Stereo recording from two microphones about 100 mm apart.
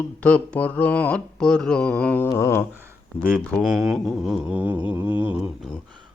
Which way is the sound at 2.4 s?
25° left (ahead or behind).